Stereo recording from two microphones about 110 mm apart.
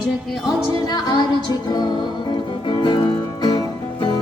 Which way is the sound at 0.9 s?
40° left (ahead or behind).